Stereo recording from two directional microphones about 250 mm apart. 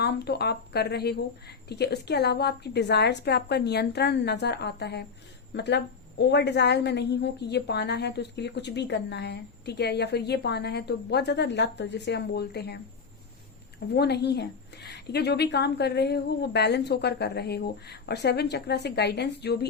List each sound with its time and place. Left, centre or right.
0.0 s a woman's voice: left